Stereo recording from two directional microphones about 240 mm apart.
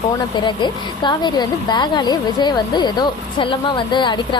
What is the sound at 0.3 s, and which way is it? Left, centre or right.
A woman's voice, centre.